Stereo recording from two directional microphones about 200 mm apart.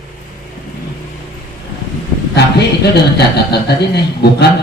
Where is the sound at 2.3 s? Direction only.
55° left (ahead or behind).